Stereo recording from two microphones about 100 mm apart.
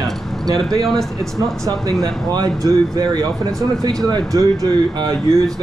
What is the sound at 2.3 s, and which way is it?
Speech, 45° right (ahead or behind).